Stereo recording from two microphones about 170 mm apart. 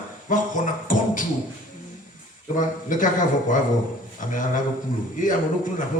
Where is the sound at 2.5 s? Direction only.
50° left (ahead or behind).